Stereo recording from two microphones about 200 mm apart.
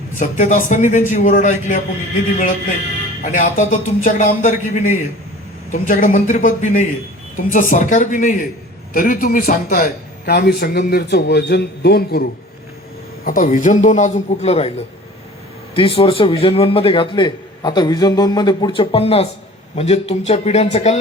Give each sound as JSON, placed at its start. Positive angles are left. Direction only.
{"t": 0.2, "sound": "a man's voice", "side_deg": 40}
{"t": 3.2, "sound": "a man's voice", "side_deg": 40}
{"t": 13.2, "sound": "a man's voice", "side_deg": 45}
{"t": 15.7, "sound": "a man's voice", "side_deg": 25}